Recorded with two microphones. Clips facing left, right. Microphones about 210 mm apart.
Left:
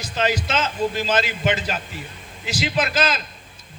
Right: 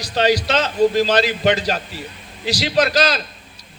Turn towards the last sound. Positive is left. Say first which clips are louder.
# right 5 dB
turn(degrees=-40)  # may be behind; listen again after turning